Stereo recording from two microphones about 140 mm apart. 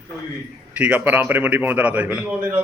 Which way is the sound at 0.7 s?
10° right (ahead or behind).